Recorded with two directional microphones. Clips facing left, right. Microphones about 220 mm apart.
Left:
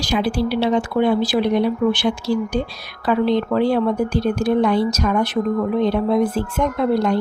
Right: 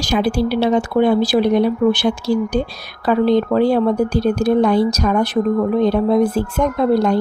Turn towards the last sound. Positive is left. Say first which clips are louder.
# right 3 dB
turn(degrees=-40)  # may be behind; listen again after turning